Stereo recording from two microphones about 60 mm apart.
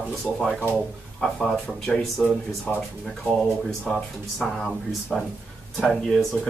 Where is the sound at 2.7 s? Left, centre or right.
Left.